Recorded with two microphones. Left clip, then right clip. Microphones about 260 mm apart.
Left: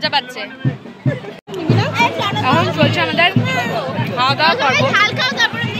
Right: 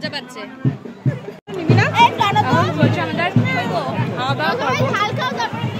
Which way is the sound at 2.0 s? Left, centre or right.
Right.